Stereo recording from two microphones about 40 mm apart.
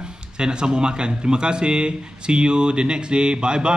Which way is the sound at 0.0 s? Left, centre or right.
Right.